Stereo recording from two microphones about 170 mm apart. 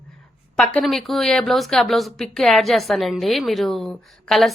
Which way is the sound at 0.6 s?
Centre (ahead or behind).